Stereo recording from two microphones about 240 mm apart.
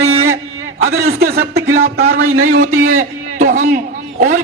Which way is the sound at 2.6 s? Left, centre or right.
Right.